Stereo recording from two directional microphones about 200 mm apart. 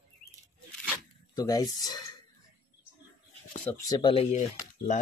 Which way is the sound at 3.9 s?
25° left (ahead or behind).